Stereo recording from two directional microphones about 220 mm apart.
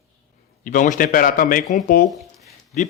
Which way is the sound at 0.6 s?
35° left (ahead or behind).